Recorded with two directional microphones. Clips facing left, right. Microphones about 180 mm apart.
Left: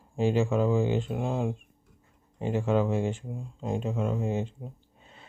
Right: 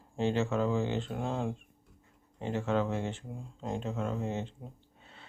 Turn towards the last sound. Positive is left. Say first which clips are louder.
# left 5 dB
turn(degrees=10)  # may be behind; listen again after turning